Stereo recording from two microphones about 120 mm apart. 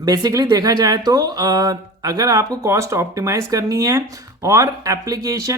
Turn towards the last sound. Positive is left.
turn(degrees=-25)  # may be behind; listen again after turning